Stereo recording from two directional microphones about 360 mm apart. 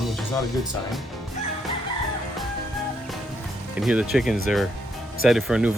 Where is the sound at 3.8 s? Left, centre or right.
Centre.